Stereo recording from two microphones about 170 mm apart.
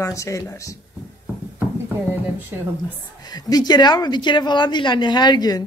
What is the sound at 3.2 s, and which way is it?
Speech, 25° left (ahead or behind).